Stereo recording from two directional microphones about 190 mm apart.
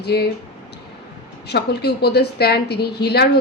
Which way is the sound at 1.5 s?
60° left (ahead or behind).